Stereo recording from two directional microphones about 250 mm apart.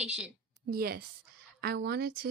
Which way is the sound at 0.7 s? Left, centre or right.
Right.